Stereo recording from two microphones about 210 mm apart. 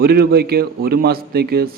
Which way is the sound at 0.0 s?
45° right (ahead or behind).